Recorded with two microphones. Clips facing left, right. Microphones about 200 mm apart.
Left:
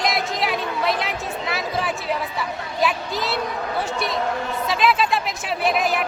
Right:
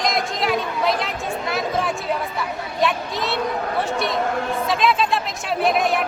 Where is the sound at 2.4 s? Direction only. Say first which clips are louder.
Right 1 dB; centre (ahead or behind).